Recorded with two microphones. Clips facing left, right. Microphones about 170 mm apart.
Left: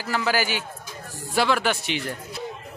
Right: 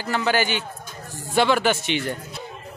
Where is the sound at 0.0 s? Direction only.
5° left (ahead or behind).